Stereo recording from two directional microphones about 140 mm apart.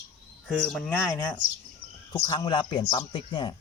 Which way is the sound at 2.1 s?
30° left (ahead or behind).